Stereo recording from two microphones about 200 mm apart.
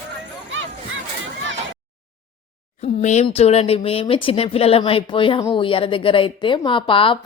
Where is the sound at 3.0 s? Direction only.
35° left (ahead or behind).